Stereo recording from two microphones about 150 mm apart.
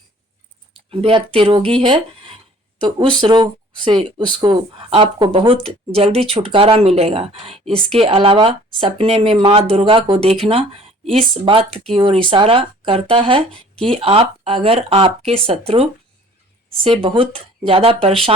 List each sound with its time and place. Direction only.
0.9 s speech: 40° right (ahead or behind)
11.7 s speech: 5° left (ahead or behind)
11.9 s speech: 35° right (ahead or behind)
13.5 s speech: 5° left (ahead or behind)
14.0 s speech: 35° right (ahead or behind)
17.0 s speech: 35° right (ahead or behind)